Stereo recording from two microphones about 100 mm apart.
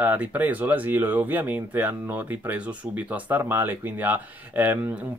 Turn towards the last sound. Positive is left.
turn(degrees=-15)  # may be behind; listen again after turning